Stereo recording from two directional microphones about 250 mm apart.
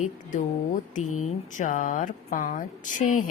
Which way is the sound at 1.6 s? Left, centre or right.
Left.